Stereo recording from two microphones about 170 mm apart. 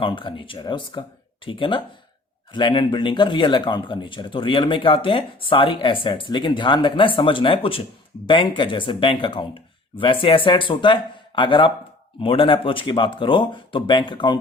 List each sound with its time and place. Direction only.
0.0 s speech: 30° left (ahead or behind)